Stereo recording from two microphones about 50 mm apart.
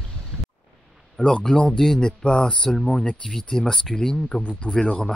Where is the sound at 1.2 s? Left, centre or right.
Centre.